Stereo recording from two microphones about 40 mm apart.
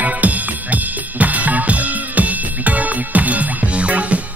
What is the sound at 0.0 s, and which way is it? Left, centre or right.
Drum kit, right.